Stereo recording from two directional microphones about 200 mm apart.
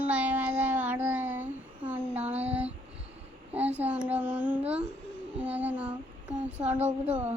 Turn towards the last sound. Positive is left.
turn(degrees=-5)  # may be behind; listen again after turning